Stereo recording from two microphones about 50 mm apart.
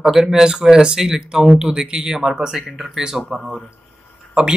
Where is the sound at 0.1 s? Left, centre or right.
Centre.